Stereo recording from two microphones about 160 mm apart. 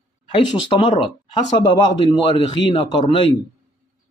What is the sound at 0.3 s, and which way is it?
A man's voice, 30° left (ahead or behind).